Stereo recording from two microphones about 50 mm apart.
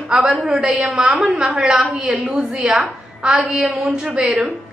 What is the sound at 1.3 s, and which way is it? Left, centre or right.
A woman's voice, centre.